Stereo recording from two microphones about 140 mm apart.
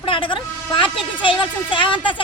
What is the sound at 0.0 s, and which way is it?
A woman's voice, 40° left (ahead or behind).